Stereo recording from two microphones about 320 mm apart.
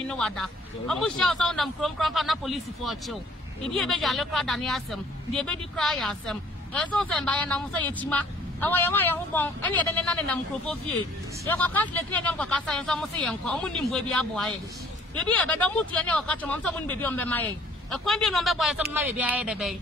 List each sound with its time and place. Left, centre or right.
0.1 s speech: centre